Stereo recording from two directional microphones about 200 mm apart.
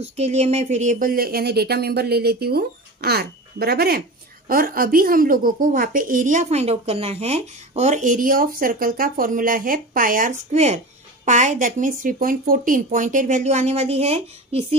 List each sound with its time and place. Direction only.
0.0 s a woman's voice: 30° right (ahead or behind)